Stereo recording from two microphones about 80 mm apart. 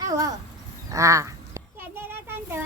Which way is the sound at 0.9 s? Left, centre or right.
Right.